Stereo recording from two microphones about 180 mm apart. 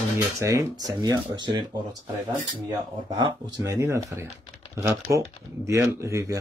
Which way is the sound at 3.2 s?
20° right (ahead or behind).